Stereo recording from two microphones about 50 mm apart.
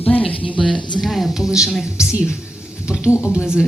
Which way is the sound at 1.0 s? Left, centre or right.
Centre.